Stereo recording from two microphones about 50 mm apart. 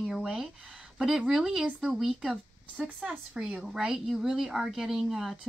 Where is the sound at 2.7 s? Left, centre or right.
Right.